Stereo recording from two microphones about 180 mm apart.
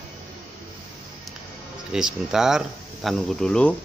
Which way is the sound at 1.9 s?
5° right (ahead or behind).